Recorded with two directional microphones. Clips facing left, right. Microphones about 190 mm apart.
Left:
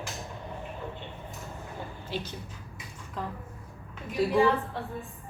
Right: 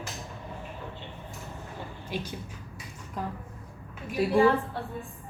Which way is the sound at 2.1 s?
15° right (ahead or behind).